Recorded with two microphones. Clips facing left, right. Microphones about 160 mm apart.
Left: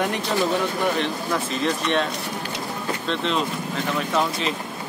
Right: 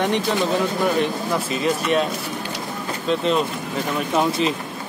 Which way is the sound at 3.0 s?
5° right (ahead or behind).